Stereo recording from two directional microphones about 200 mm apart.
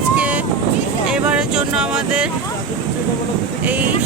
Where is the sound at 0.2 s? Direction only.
5° right (ahead or behind).